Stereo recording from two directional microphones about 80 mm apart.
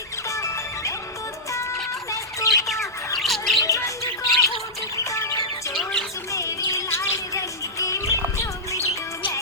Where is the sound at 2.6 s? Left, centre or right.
Centre.